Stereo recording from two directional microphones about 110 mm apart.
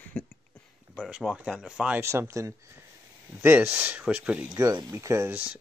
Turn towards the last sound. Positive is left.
turn(degrees=-25)  # may be behind; listen again after turning